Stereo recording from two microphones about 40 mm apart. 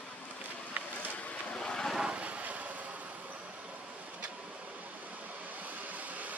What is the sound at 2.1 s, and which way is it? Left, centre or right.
Vehicle, right.